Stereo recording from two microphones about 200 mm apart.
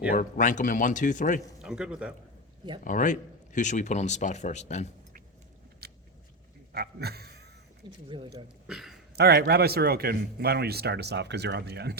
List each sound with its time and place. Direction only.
0.1 s speech: 40° left (ahead or behind)
1.6 s a man's voice: 5° right (ahead or behind)
2.8 s speech: 40° left (ahead or behind)
5.8 s biting: 50° right (ahead or behind)
6.7 s a sound: 50° right (ahead or behind)
7.8 s speech: 25° right (ahead or behind)
8.6 s speech: centre (ahead or behind)
9.1 s speech: 55° right (ahead or behind)